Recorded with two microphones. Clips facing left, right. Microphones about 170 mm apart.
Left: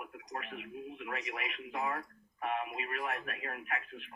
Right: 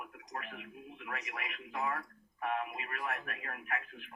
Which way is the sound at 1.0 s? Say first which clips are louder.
Left 1 dB; 20° left (ahead or behind).